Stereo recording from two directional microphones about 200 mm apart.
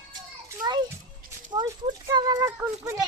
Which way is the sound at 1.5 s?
20° right (ahead or behind).